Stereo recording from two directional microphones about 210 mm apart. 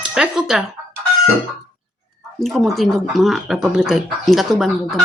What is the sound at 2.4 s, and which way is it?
Speech, centre (ahead or behind).